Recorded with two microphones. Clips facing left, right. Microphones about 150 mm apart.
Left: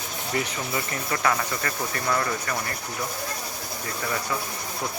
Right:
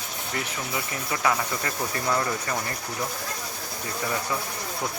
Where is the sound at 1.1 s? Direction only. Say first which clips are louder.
Even; 15° right (ahead or behind).